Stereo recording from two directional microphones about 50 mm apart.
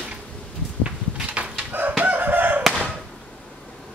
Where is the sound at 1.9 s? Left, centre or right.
Right.